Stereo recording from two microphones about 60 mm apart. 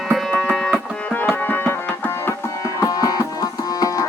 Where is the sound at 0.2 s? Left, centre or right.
Centre.